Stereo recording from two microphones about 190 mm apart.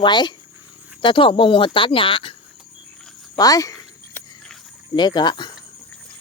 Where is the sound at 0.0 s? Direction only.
25° left (ahead or behind).